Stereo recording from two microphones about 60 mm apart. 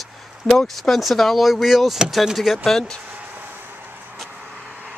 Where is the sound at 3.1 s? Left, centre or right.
Right.